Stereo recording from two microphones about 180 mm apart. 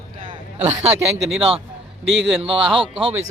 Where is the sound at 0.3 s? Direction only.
35° right (ahead or behind).